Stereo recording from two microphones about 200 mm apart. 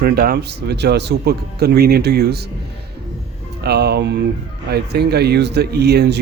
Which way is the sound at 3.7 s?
55° right (ahead or behind).